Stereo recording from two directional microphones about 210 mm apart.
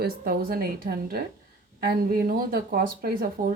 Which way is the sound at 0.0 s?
45° right (ahead or behind).